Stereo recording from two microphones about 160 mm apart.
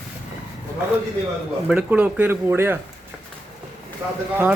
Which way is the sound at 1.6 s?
5° right (ahead or behind).